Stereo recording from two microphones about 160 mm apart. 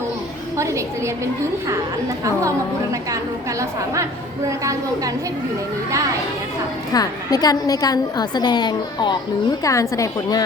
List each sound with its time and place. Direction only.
0.5 s a woman's voice: 20° right (ahead or behind)
3.6 s a woman's voice: 20° right (ahead or behind)
6.9 s a woman's voice: 25° left (ahead or behind)